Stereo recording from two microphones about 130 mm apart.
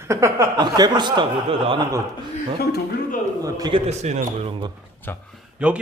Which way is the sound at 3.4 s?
30° right (ahead or behind).